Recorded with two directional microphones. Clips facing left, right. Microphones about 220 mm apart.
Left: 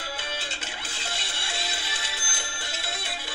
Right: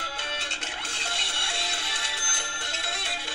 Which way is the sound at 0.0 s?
5° left (ahead or behind).